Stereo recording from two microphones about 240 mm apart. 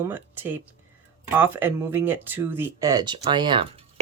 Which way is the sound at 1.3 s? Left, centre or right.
Centre.